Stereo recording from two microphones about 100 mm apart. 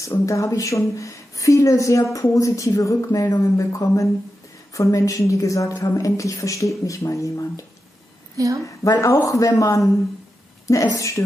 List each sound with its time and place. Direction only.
0.0 s a woman's voice: 30° left (ahead or behind)
8.8 s a woman's voice: 35° left (ahead or behind)